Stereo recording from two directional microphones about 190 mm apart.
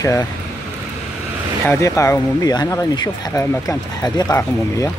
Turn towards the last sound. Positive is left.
turn(degrees=15)  # may be behind; listen again after turning